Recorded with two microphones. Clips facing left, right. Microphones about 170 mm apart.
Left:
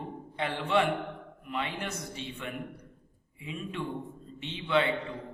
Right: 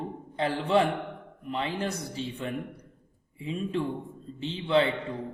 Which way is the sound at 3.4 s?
35° right (ahead or behind).